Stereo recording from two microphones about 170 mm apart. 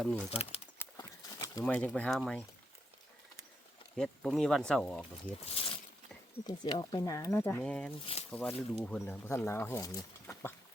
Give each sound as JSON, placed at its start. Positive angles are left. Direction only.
{"t": 0.0, "sound": "speech", "side_deg": 0}
{"t": 0.3, "sound": "speech", "side_deg": 35}
{"t": 0.9, "sound": "horse", "side_deg": 20}
{"t": 1.6, "sound": "speech", "side_deg": 5}
{"t": 3.9, "sound": "speech", "side_deg": 5}
{"t": 5.5, "sound": "speech", "side_deg": 35}